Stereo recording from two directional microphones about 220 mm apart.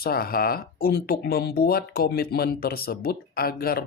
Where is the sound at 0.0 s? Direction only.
45° left (ahead or behind).